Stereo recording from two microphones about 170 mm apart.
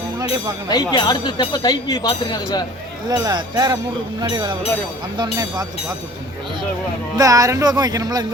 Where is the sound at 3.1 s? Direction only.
20° right (ahead or behind).